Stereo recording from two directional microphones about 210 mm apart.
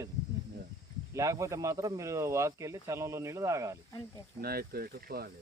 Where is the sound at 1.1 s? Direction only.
15° right (ahead or behind).